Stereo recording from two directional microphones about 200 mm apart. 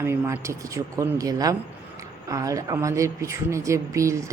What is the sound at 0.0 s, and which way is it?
Speech, 15° right (ahead or behind).